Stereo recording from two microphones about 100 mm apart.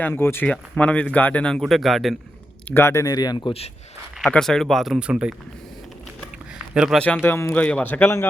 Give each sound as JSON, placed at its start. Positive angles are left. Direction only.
{"t": 0.1, "sound": "speech", "side_deg": 25}
{"t": 0.4, "sound": "a man's voice", "side_deg": 10}
{"t": 2.6, "sound": "speech", "side_deg": 25}
{"t": 4.3, "sound": "speech", "side_deg": 5}
{"t": 6.7, "sound": "speech", "side_deg": -5}
{"t": 7.0, "sound": "speech", "side_deg": 15}
{"t": 7.5, "sound": "a man's voice", "side_deg": 15}